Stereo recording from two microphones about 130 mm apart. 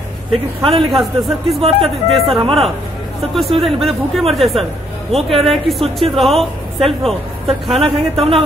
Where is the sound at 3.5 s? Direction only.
Centre (ahead or behind).